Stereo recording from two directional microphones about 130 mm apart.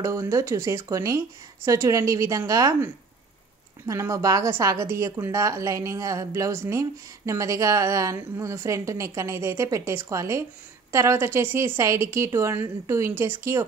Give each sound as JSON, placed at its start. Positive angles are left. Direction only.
{"t": 0.0, "sound": "a woman's voice", "side_deg": -25}